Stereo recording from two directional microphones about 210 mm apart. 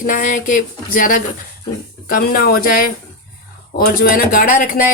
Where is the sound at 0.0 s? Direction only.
40° left (ahead or behind).